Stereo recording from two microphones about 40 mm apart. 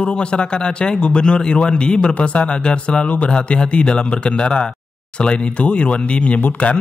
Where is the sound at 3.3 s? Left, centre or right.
Left.